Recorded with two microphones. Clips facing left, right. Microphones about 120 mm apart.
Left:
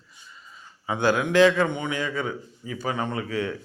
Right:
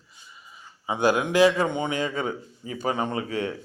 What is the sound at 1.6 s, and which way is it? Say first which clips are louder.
A man's voice: even; 20° right (ahead or behind).